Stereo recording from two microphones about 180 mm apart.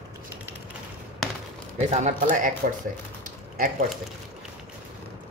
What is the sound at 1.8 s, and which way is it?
Speech, 40° right (ahead or behind).